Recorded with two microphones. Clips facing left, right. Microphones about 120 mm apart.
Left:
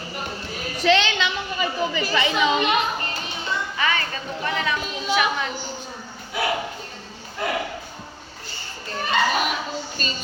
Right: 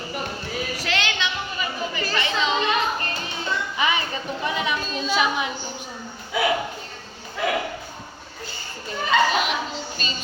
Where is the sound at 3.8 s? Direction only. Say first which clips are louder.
Right 1 dB; 15° right (ahead or behind).